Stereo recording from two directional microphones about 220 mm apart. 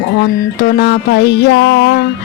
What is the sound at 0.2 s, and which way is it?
Music, 50° left (ahead or behind).